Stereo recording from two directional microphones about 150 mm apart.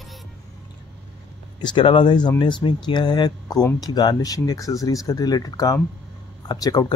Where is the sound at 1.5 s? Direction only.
30° left (ahead or behind).